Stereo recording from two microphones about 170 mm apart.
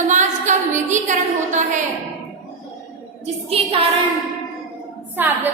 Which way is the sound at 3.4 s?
35° right (ahead or behind).